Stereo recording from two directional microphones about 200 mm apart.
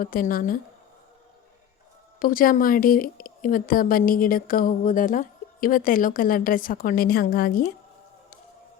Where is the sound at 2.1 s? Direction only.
45° left (ahead or behind).